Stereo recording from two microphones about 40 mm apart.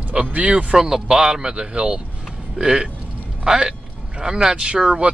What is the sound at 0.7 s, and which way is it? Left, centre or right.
Speech, centre.